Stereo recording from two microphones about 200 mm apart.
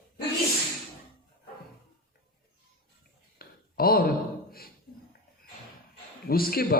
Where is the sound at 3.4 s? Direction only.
50° left (ahead or behind).